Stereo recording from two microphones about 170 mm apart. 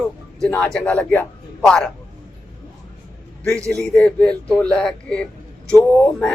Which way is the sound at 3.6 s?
20° right (ahead or behind).